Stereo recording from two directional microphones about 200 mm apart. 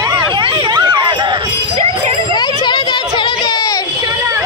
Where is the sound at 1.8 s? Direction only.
30° right (ahead or behind).